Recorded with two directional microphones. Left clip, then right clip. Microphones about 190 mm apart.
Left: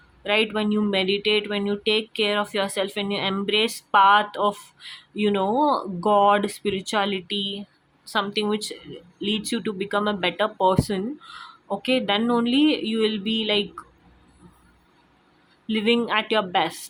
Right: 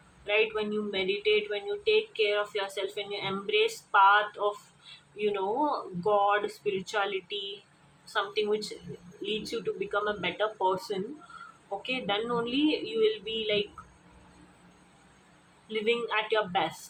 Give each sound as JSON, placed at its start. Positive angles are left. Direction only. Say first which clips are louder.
{"t": 0.3, "sound": "speech", "louder": "left 5 dB", "side_deg": 55}
{"t": 15.7, "sound": "speech", "louder": "left 7 dB", "side_deg": 50}